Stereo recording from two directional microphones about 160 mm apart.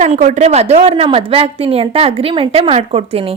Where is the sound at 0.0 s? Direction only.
45° right (ahead or behind).